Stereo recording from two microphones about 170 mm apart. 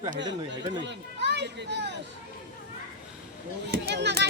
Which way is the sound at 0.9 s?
90° right.